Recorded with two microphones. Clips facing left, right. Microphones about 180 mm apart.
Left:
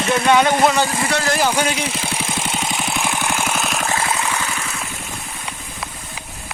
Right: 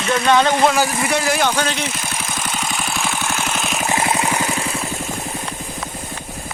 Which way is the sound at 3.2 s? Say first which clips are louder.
Left 1 dB; 10° left (ahead or behind).